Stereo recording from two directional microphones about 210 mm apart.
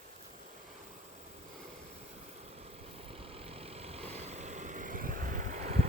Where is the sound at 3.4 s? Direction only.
30° right (ahead or behind).